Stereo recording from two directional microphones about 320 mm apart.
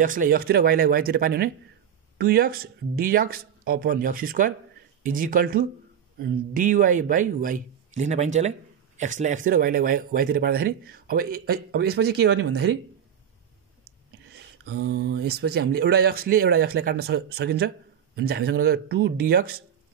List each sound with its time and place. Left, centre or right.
0.0 s a man's voice: right
14.3 s a man's voice: right